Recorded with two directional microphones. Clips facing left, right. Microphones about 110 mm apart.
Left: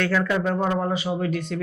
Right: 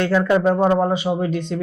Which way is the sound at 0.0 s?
20° right (ahead or behind).